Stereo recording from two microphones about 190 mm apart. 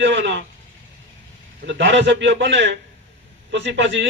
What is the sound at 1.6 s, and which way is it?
Speech, 70° right (ahead or behind).